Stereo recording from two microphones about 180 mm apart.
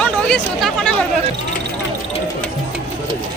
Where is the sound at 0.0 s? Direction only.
5° left (ahead or behind).